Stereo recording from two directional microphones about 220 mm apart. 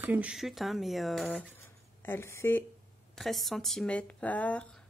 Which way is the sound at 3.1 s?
Centre (ahead or behind).